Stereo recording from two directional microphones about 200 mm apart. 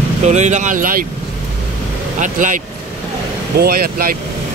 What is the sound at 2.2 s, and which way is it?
Speech, 40° right (ahead or behind).